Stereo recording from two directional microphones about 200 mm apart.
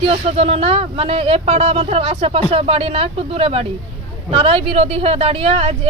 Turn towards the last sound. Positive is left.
turn(degrees=-30)  # may be behind; listen again after turning